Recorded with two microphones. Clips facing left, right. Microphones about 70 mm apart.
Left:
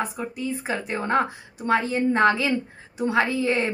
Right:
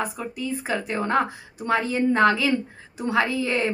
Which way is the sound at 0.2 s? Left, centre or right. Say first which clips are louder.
Even; left.